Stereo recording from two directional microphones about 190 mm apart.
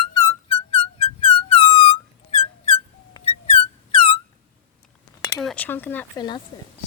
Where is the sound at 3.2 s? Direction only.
35° left (ahead or behind).